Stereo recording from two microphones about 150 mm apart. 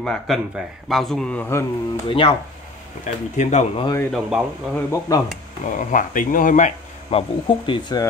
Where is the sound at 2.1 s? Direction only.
35° left (ahead or behind).